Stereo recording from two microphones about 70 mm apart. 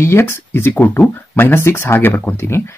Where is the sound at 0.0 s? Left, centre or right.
Left.